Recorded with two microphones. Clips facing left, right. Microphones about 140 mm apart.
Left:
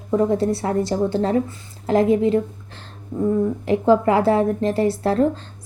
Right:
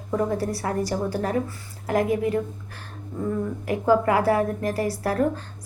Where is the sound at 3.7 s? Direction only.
25° left (ahead or behind).